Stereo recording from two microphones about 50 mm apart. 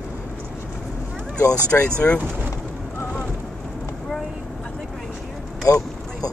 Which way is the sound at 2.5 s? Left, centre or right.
Left.